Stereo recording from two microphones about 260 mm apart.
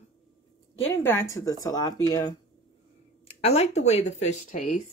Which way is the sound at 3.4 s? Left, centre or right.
Left.